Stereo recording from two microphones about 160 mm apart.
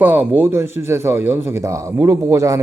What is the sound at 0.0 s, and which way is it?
A man's voice, 10° right (ahead or behind).